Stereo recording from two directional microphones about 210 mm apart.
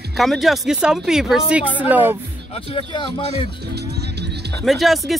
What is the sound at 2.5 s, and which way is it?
Speech, 25° left (ahead or behind).